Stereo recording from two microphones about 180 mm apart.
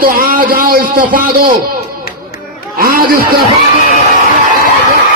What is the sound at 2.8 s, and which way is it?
Speech, 55° right (ahead or behind).